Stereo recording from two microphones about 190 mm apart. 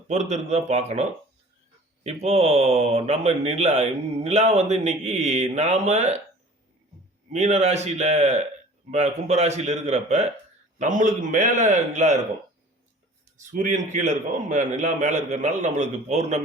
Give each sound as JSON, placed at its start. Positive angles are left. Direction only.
{"t": 0.1, "sound": "speech", "side_deg": -35}
{"t": 2.0, "sound": "speech", "side_deg": -35}
{"t": 7.3, "sound": "speech", "side_deg": -35}
{"t": 13.3, "sound": "speech", "side_deg": -40}